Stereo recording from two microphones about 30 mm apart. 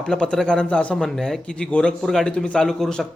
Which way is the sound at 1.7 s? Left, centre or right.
Left.